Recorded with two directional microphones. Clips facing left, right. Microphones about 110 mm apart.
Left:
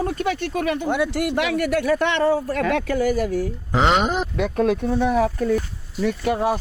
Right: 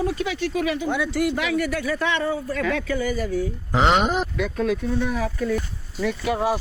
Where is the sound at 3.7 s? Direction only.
Centre (ahead or behind).